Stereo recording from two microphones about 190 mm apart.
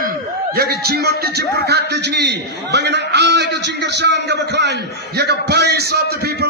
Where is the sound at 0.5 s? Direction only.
55° right (ahead or behind).